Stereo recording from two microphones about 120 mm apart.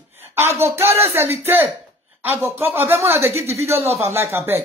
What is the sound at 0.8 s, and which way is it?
Speech, 60° right (ahead or behind).